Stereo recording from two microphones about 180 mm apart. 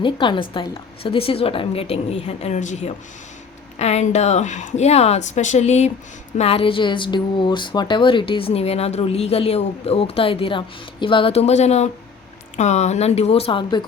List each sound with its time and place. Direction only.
0.0 s a woman's voice: 25° left (ahead or behind)